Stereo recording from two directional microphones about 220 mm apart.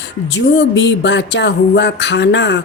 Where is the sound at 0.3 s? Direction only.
50° left (ahead or behind).